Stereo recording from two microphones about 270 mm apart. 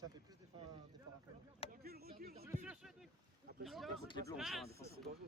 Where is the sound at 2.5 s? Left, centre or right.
Centre.